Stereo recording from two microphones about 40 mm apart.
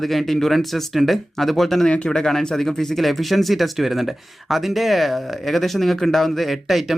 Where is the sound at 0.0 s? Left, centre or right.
Centre.